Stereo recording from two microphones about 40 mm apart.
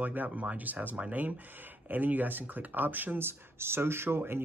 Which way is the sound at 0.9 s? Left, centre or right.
Right.